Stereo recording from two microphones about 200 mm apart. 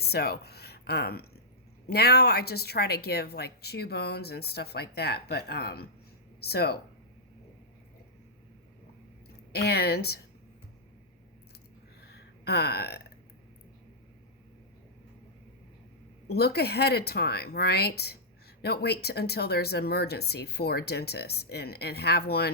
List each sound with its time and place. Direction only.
0.0 s speech: 55° left (ahead or behind)
9.5 s speech: 55° left (ahead or behind)
12.0 s a sound: 55° left (ahead or behind)
16.2 s speech: 55° left (ahead or behind)